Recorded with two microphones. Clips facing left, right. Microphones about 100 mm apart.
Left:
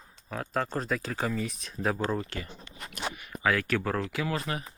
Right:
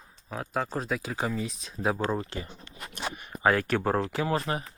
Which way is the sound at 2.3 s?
25° right (ahead or behind).